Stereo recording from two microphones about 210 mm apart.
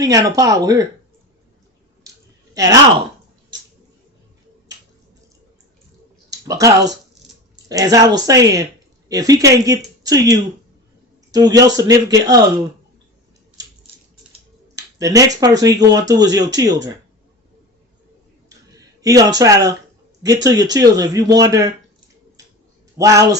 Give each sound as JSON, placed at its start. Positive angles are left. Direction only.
{"t": 0.0, "sound": "speech", "side_deg": -15}
{"t": 6.3, "sound": "speech", "side_deg": -15}
{"t": 14.8, "sound": "speech", "side_deg": -15}
{"t": 18.4, "sound": "a sound", "side_deg": -15}
{"t": 20.2, "sound": "speech", "side_deg": -15}
{"t": 23.0, "sound": "speech", "side_deg": -15}